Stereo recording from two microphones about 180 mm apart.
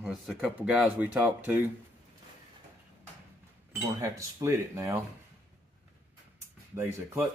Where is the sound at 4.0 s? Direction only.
15° right (ahead or behind).